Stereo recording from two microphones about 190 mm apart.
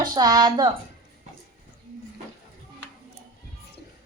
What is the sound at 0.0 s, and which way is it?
Speech, 20° right (ahead or behind).